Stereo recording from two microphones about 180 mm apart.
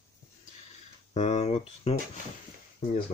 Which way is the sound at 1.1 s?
40° left (ahead or behind).